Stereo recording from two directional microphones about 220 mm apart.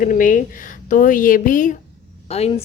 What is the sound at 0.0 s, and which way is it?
A woman's voice, 40° left (ahead or behind).